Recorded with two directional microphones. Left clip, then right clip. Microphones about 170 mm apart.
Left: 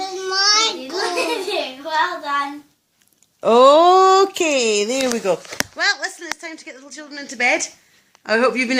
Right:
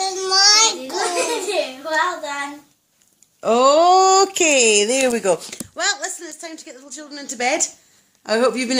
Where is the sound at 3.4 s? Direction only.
40° left (ahead or behind).